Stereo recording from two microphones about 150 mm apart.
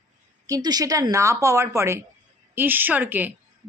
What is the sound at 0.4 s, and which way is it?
A woman's voice, 25° right (ahead or behind).